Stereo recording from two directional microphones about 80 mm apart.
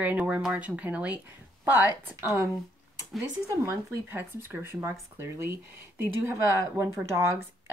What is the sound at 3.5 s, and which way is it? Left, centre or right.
Speech, right.